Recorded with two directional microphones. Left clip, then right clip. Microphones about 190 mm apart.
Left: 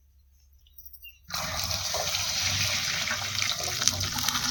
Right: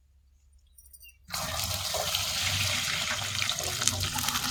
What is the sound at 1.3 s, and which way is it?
Toilet flush, 5° right (ahead or behind).